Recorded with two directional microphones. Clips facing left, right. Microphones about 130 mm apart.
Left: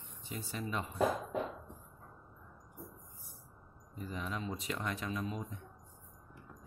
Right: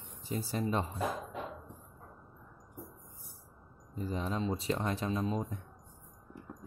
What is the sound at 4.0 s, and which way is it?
Speech, 30° right (ahead or behind).